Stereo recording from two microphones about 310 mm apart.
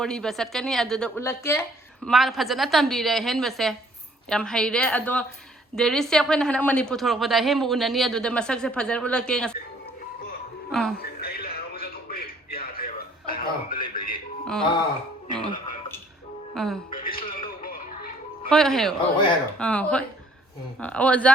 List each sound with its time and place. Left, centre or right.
0.0 s a woman's voice: centre
10.7 s speech: centre
11.0 s music: left
14.4 s speech: centre
16.6 s a woman's voice: centre
16.9 s music: left
18.4 s a woman's voice: centre